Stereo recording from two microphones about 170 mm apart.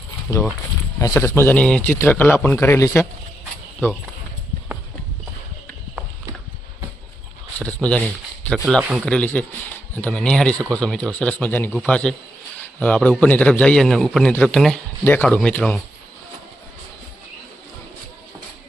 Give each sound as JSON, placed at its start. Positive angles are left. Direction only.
{"t": 0.3, "sound": "a man's voice", "side_deg": 15}
{"t": 7.6, "sound": "speech", "side_deg": 5}
{"t": 8.5, "sound": "a man's voice", "side_deg": -5}
{"t": 12.5, "sound": "a sound", "side_deg": 5}
{"t": 13.1, "sound": "a man's voice", "side_deg": 10}